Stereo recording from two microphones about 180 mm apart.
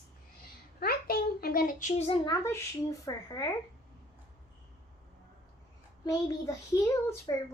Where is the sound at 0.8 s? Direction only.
60° left (ahead or behind).